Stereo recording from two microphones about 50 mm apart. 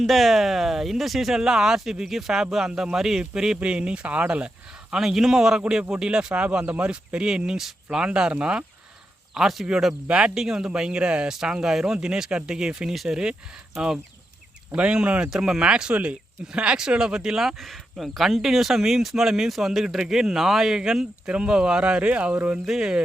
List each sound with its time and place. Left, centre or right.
0.0 s speech: centre; by 4.5 s right
4.9 s speech: centre; by 8.6 s right
9.3 s speech: centre
10.3 s speech: centre
14.7 s speech: right
22.6 s speech: centre